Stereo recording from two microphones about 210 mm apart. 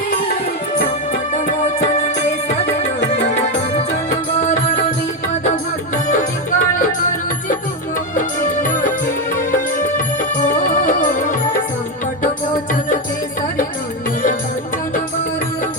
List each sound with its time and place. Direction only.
3.2 s music: 30° left (ahead or behind)
6.7 s music: 40° left (ahead or behind)